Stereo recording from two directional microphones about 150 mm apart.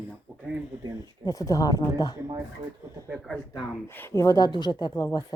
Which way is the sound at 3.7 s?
15° left (ahead or behind).